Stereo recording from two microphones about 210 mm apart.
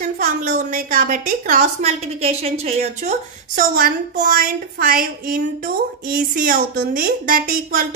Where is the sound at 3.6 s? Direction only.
40° right (ahead or behind).